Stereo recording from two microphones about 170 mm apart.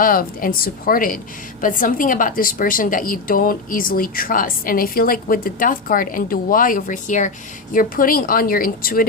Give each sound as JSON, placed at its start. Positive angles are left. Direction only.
{"t": 0.0, "sound": "a woman's voice", "side_deg": 55}